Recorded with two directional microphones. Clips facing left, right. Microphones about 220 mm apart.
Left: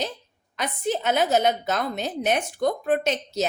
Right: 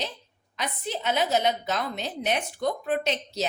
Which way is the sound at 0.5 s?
50° left (ahead or behind).